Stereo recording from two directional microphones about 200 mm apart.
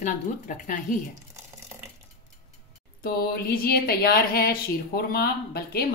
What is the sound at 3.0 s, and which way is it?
Speech, 50° left (ahead or behind).